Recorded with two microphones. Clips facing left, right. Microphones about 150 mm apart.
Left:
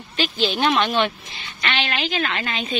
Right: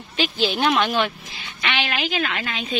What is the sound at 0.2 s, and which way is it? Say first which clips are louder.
A woman's voice: even; 10° right (ahead or behind).